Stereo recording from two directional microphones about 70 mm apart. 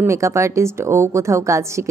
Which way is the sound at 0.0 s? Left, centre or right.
Right.